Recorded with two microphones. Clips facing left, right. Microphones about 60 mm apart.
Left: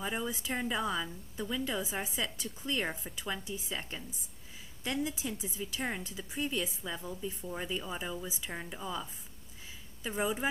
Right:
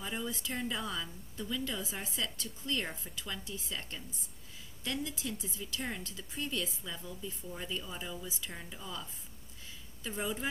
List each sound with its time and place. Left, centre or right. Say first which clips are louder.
0.0 s a woman's voice: left 3 dB; centre